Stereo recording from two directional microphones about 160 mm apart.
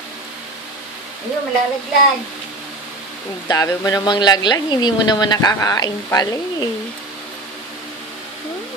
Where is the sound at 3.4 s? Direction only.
25° left (ahead or behind).